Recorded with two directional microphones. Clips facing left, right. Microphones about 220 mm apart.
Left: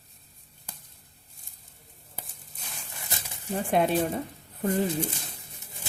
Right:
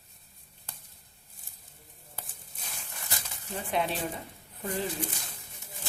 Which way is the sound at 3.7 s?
50° left (ahead or behind).